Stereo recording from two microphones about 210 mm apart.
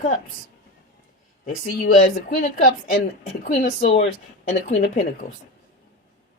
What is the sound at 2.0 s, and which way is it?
Speech, 40° left (ahead or behind).